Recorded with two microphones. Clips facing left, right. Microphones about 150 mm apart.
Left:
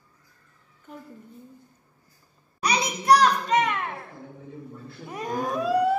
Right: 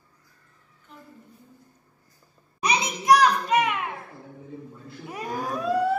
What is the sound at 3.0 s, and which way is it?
Music, 10° right (ahead or behind).